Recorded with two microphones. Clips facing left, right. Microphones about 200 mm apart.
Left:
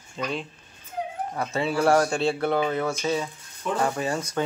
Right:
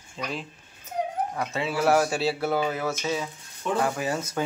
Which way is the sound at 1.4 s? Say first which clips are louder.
Left 4 dB; centre (ahead or behind).